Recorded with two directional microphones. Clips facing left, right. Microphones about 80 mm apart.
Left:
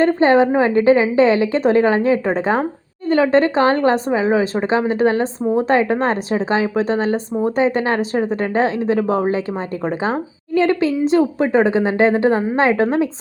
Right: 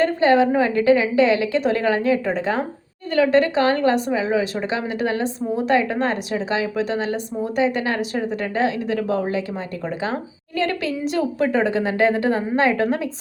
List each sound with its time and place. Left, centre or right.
0.0 s a woman's voice: left